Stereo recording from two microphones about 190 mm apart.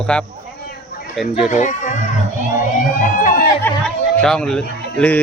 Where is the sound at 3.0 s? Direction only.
45° left (ahead or behind).